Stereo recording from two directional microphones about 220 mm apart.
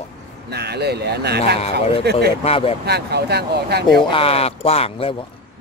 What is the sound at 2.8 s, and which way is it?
Speech, 45° right (ahead or behind).